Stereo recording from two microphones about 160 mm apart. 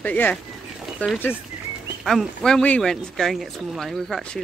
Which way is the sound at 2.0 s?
Centre (ahead or behind).